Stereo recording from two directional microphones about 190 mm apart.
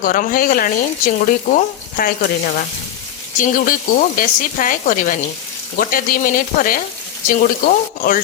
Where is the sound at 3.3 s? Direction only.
45° left (ahead or behind).